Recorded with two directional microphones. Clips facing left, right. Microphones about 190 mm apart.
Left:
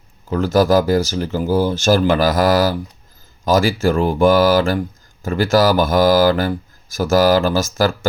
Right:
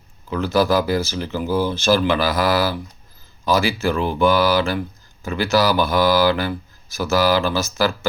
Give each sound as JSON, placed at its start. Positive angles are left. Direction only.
{"t": 0.3, "sound": "speech", "side_deg": 45}